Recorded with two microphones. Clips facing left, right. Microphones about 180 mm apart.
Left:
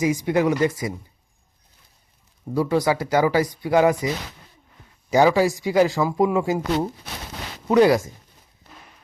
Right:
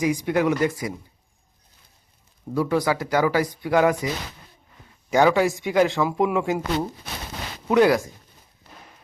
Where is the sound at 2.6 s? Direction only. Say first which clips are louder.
Left 2 dB; 15° left (ahead or behind).